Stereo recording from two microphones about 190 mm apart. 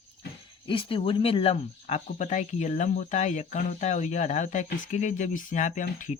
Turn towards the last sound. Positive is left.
turn(degrees=40)  # may be behind; listen again after turning